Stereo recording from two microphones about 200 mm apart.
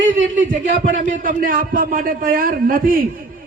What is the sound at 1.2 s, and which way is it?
A man's voice, 45° right (ahead or behind).